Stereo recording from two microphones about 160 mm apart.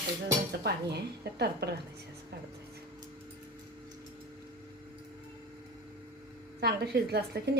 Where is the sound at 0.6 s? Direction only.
90° right.